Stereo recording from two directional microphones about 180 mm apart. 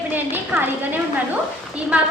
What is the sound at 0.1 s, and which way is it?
A woman's voice, 10° right (ahead or behind).